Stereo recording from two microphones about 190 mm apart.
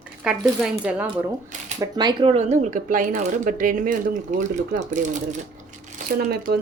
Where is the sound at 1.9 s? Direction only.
25° right (ahead or behind); by 5.4 s 40° right (ahead or behind).